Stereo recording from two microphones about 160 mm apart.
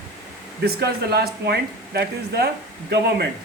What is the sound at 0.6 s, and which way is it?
Speech, 85° right.